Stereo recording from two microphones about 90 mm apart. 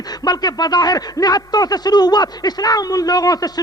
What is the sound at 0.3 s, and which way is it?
A man's voice, 45° left (ahead or behind).